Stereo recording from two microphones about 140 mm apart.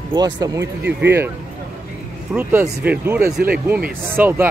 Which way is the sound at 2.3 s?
15° right (ahead or behind).